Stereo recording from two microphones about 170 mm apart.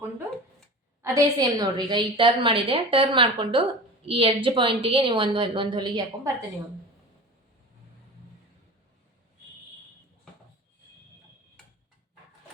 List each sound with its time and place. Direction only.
1.0 s a woman's voice: 20° right (ahead or behind)